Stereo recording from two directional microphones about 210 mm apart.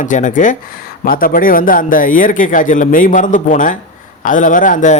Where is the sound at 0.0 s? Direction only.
35° left (ahead or behind).